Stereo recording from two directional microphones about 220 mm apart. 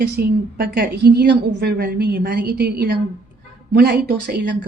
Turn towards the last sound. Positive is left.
turn(degrees=-50)  # may be behind; listen again after turning